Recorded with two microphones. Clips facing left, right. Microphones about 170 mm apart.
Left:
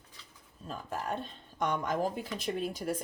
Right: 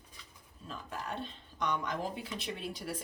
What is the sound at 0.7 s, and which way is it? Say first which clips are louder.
Speech: left 5 dB; 45° left (ahead or behind).